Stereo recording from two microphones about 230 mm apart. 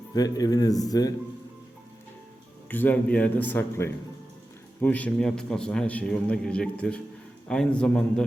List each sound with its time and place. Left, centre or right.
0.1 s a man's voice: centre
2.6 s a man's voice: centre